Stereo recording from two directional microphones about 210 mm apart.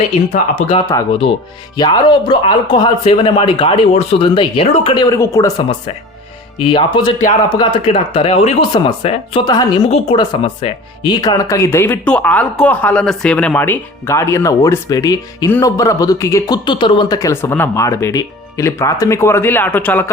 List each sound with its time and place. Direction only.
0.3 s speech: 30° left (ahead or behind)
0.9 s speech: 15° left (ahead or behind)